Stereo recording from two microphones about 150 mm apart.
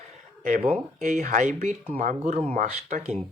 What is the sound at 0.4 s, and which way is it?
Speech, 45° right (ahead or behind).